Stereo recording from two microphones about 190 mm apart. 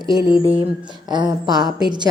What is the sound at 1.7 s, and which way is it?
Speech, 5° right (ahead or behind).